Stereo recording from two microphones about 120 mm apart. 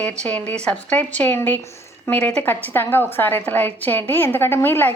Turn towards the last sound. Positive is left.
turn(degrees=15)  # may be behind; listen again after turning